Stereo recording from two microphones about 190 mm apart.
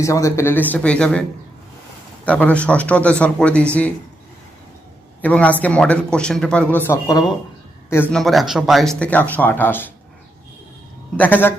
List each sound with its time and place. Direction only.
0.0 s speech: 15° left (ahead or behind)
2.2 s speech: 5° left (ahead or behind)
5.2 s speech: 5° left (ahead or behind)
11.2 s speech: 10° left (ahead or behind)